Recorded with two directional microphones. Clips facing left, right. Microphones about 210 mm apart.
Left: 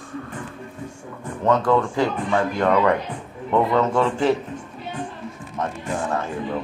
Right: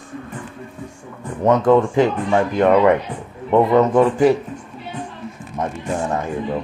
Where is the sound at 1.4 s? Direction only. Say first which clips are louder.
Right 5 dB; 20° right (ahead or behind).